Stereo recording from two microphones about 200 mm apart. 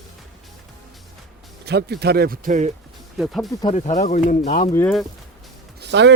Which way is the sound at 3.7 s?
35° left (ahead or behind).